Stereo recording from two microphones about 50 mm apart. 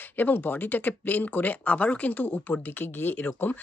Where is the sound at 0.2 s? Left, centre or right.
Left.